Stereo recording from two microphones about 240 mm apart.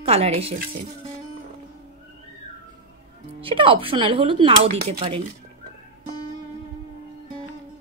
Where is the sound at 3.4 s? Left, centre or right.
Right.